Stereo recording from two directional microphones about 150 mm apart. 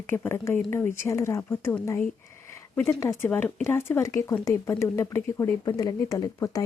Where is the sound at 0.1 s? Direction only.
15° left (ahead or behind).